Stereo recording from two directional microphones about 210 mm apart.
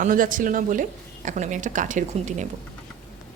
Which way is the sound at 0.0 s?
40° right (ahead or behind).